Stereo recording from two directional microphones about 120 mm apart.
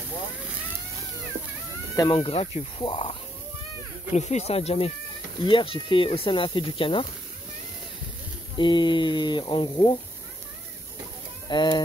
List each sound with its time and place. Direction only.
2.0 s speech: 45° left (ahead or behind)
4.1 s speech: 70° left (ahead or behind)
5.4 s speech: 45° left (ahead or behind)
8.5 s speech: 40° left (ahead or behind)
11.4 s speech: 40° left (ahead or behind)